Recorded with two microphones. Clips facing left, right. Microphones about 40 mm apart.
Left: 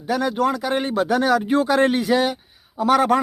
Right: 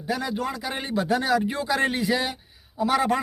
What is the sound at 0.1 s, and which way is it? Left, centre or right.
Speech, left.